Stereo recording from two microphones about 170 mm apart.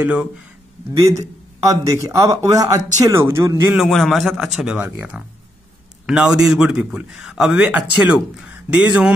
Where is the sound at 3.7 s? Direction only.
Centre (ahead or behind).